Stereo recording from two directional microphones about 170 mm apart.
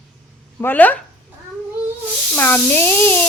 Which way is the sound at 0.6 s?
10° left (ahead or behind).